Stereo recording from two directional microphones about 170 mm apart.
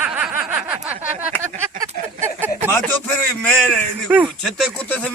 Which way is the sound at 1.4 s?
15° right (ahead or behind).